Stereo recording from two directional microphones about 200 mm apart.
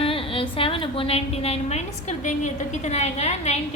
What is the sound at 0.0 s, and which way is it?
A woman's voice, 25° left (ahead or behind).